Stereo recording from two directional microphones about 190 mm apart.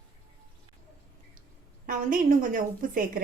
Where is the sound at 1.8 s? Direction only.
45° right (ahead or behind).